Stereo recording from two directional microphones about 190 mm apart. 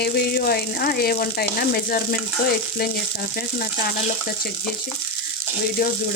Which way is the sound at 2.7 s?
50° left (ahead or behind).